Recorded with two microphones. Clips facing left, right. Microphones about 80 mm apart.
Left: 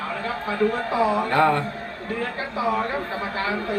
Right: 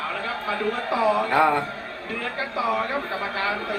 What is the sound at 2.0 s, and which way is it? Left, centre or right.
Speech, left.